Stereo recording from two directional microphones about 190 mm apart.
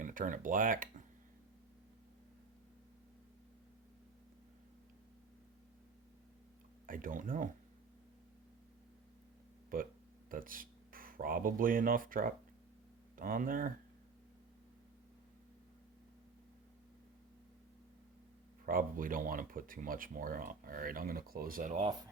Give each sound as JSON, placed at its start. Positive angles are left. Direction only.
{"t": 0.0, "sound": "speech", "side_deg": -45}
{"t": 6.8, "sound": "speech", "side_deg": -45}
{"t": 9.7, "sound": "speech", "side_deg": -45}
{"t": 18.6, "sound": "speech", "side_deg": -45}